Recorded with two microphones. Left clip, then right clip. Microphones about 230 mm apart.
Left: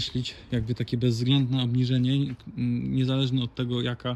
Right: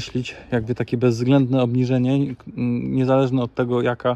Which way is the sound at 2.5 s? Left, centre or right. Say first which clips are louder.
Right 5 dB; right.